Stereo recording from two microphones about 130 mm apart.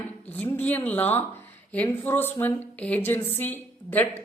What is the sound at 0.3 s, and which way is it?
A woman's voice, 15° left (ahead or behind).